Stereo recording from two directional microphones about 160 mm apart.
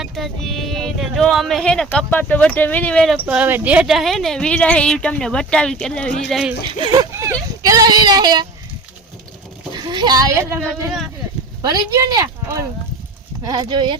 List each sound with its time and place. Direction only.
0.0 s speech: centre (ahead or behind)
3.2 s speech: 10° right (ahead or behind)
6.7 s speech: 30° right (ahead or behind)
9.7 s speech: 25° right (ahead or behind)
11.6 s speech: 25° right (ahead or behind)